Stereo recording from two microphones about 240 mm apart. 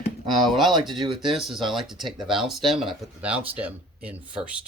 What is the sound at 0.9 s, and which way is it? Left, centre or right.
Speech, centre.